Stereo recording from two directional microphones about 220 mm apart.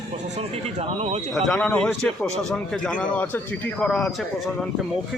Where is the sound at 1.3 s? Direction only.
Centre (ahead or behind).